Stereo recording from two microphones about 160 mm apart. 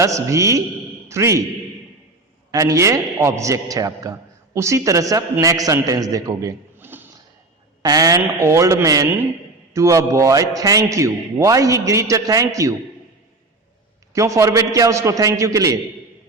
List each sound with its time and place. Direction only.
0.0 s a man's voice: 20° right (ahead or behind)
2.5 s a man's voice: 20° right (ahead or behind)
7.8 s a man's voice: 25° right (ahead or behind)
14.1 s a man's voice: 20° right (ahead or behind)